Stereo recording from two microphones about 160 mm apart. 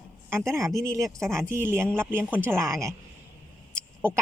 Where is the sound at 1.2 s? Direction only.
5° left (ahead or behind).